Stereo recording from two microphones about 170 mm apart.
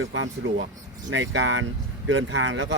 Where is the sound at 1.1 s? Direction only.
90° right.